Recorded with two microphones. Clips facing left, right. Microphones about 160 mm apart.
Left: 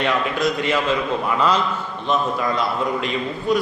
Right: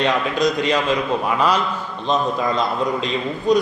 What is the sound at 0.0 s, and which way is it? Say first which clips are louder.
Speech: right 2 dB; 20° right (ahead or behind).